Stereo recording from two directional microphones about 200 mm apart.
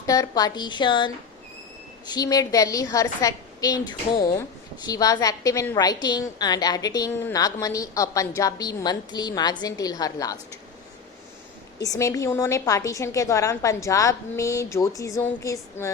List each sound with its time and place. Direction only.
0.0 s a woman's voice: 15° left (ahead or behind)
11.8 s a woman's voice: 15° left (ahead or behind)